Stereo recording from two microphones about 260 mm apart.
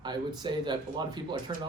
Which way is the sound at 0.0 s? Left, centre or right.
Centre.